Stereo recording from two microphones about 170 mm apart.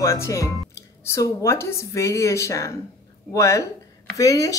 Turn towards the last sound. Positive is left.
turn(degrees=20)  # may be behind; listen again after turning